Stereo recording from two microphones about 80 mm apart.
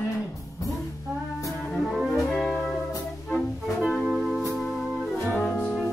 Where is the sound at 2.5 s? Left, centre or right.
Left.